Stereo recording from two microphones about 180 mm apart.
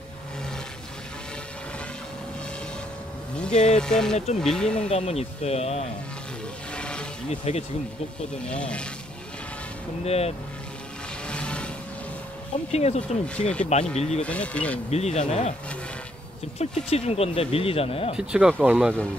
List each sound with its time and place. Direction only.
3.7 s speech: 5° left (ahead or behind)
4.8 s speech: 35° left (ahead or behind)
6.7 s wild animals: 5° left (ahead or behind)
7.2 s speech: 35° left (ahead or behind)
8.5 s speech: 5° left (ahead or behind)
10.0 s speech: 35° left (ahead or behind)
11.2 s music: 5° left (ahead or behind)
12.7 s speech: 35° left (ahead or behind)
14.2 s speech: 5° left (ahead or behind)
14.9 s speech: 35° left (ahead or behind)
16.5 s speech: 35° left (ahead or behind)
18.1 s speech: 5° right (ahead or behind)